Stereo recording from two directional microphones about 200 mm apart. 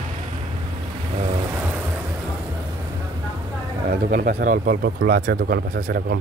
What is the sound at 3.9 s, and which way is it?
Speech, 45° right (ahead or behind).